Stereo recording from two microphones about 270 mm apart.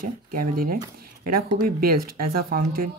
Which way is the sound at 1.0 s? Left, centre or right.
Right.